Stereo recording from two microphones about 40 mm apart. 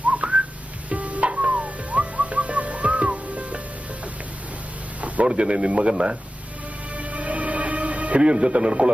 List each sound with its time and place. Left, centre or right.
0.0 s whistling: right
0.9 s music: right
4.9 s a sound: right
5.2 s speech: right
6.9 s music: right
8.2 s speech: right